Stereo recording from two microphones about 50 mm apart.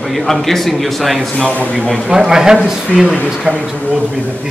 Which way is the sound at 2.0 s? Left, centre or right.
Centre.